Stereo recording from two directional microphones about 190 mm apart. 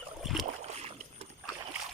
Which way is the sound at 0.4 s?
35° right (ahead or behind).